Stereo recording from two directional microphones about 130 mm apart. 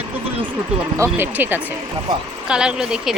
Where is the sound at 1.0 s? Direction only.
15° right (ahead or behind).